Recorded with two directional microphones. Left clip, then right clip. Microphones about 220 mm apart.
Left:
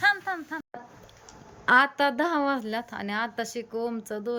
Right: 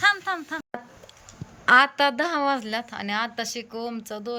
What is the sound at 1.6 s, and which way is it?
A woman's voice, 10° left (ahead or behind).